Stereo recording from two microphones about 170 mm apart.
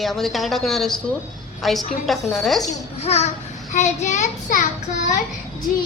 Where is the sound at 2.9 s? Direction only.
40° left (ahead or behind).